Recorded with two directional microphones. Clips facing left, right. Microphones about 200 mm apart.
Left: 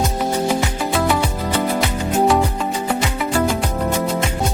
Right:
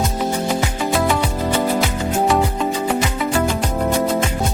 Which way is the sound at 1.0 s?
Centre (ahead or behind).